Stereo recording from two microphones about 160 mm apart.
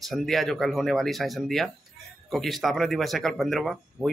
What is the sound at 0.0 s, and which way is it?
A man's voice, centre (ahead or behind).